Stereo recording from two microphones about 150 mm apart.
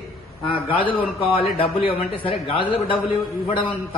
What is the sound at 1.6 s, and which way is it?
A man's voice, 35° left (ahead or behind).